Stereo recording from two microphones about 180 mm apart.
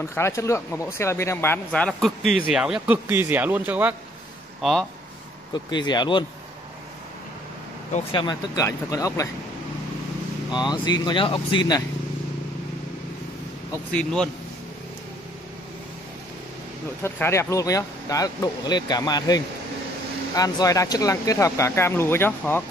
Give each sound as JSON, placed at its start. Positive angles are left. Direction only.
{"t": 0.0, "sound": "speech", "side_deg": 15}
{"t": 5.5, "sound": "speech", "side_deg": 25}
{"t": 8.1, "sound": "speech", "side_deg": 25}
{"t": 10.5, "sound": "speech", "side_deg": 25}
{"t": 13.9, "sound": "speech", "side_deg": 5}
{"t": 17.0, "sound": "speech", "side_deg": 15}